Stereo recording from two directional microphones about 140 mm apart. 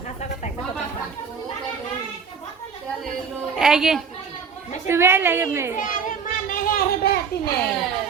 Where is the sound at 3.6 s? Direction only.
5° right (ahead or behind).